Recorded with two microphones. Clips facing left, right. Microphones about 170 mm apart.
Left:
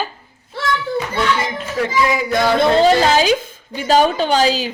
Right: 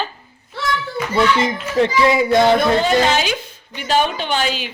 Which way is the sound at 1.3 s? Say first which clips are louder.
Right 4 dB; 25° right (ahead or behind).